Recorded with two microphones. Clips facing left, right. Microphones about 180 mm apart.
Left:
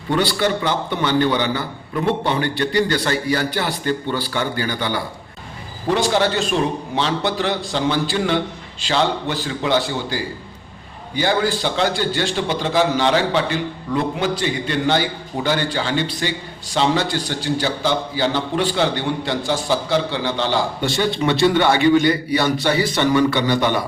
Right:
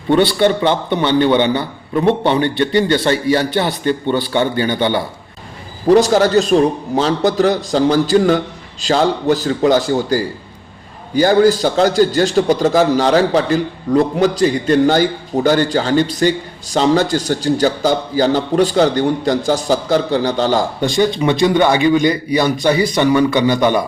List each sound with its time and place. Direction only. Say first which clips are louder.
0.1 s a man's voice: right 6 dB; 20° right (ahead or behind)
5.9 s a man's voice: right 8 dB; 40° right (ahead or behind)
20.8 s a man's voice: right 6 dB; 15° right (ahead or behind)